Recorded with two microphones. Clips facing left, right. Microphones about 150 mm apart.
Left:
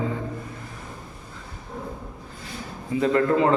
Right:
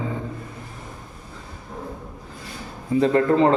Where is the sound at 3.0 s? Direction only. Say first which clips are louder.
Right 2 dB; 30° right (ahead or behind).